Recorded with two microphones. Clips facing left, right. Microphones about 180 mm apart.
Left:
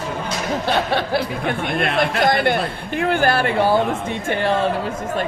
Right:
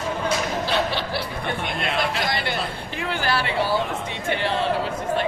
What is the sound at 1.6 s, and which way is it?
Speech, 55° left (ahead or behind).